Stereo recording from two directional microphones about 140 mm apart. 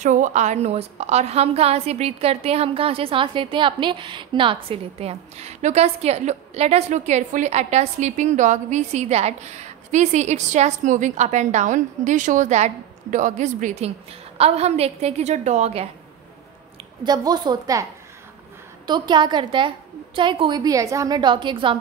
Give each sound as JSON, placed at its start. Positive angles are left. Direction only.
{"t": 0.0, "sound": "a woman's voice", "side_deg": -60}
{"t": 17.0, "sound": "a woman's voice", "side_deg": -30}
{"t": 18.9, "sound": "a woman's voice", "side_deg": -30}